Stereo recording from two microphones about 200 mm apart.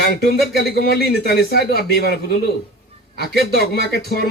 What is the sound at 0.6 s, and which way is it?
A man's voice, 55° left (ahead or behind).